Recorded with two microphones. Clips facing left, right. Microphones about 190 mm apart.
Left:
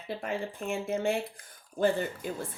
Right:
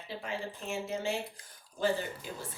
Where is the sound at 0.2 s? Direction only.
55° left (ahead or behind).